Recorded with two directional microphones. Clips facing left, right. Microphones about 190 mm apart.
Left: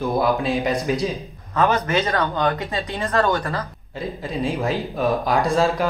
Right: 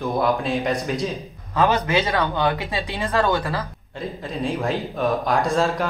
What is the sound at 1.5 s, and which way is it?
Speech, 15° right (ahead or behind).